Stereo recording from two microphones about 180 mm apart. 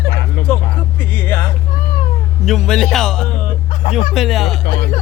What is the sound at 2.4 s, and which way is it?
Speech, centre (ahead or behind).